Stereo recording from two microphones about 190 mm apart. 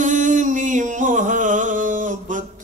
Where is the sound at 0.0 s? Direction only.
45° right (ahead or behind).